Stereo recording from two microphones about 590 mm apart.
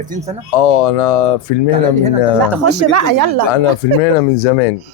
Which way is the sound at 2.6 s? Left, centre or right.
Right.